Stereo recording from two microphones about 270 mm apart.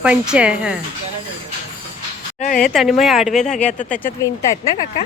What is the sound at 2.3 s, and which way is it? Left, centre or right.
Speech, left.